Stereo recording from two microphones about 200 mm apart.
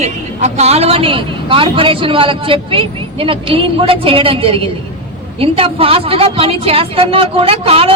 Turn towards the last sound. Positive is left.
turn(degrees=-30)  # may be behind; listen again after turning